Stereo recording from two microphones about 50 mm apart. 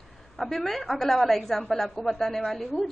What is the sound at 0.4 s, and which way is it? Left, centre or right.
A woman's voice, centre.